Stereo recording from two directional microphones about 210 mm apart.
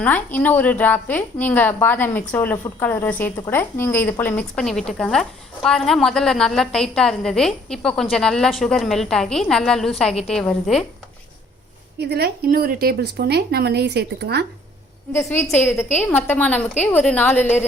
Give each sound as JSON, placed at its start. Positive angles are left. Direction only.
{"t": 0.0, "sound": "a woman's voice", "side_deg": 10}
{"t": 11.9, "sound": "speech", "side_deg": -50}
{"t": 15.1, "sound": "a woman's voice", "side_deg": 15}